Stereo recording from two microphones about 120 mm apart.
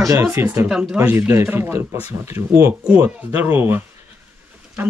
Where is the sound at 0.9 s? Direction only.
20° right (ahead or behind).